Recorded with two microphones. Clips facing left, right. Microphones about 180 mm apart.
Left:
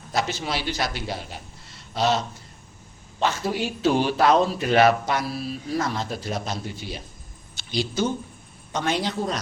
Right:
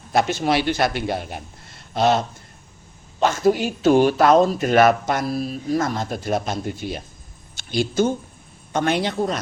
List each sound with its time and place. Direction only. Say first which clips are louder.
0.1 s a woman's voice: right 7 dB; 55° right (ahead or behind)